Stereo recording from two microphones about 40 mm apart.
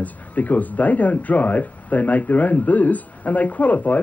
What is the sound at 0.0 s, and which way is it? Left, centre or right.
A man's voice, left.